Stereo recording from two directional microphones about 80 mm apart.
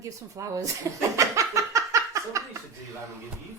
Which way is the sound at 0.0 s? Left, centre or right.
Right.